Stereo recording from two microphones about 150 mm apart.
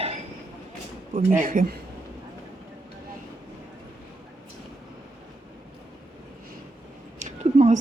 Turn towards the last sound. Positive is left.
turn(degrees=-50)  # may be behind; listen again after turning